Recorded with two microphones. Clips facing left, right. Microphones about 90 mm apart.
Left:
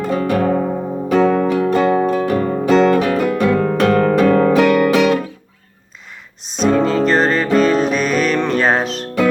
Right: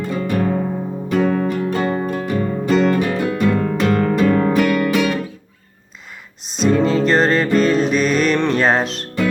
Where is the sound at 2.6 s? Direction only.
80° left; by 4.5 s 55° left (ahead or behind).